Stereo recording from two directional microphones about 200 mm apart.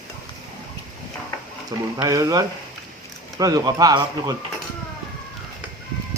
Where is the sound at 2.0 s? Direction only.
15° right (ahead or behind).